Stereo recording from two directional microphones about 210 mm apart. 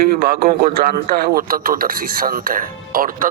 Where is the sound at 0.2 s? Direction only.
45° right (ahead or behind).